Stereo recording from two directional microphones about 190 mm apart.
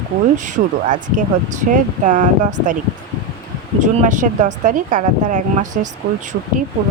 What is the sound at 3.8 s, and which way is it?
Speech, 40° right (ahead or behind).